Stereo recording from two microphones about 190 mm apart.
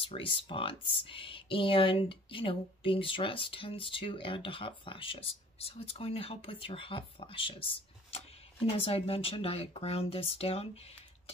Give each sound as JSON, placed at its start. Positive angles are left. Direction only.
{"t": 0.0, "sound": "speech", "side_deg": 30}